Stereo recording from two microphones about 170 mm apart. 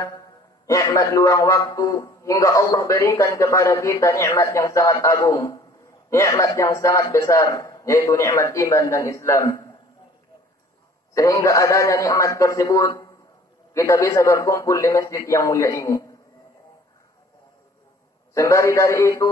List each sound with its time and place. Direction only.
0.7 s a man's voice: 20° left (ahead or behind)
11.1 s a man's voice: 20° left (ahead or behind)
18.3 s a man's voice: 15° left (ahead or behind)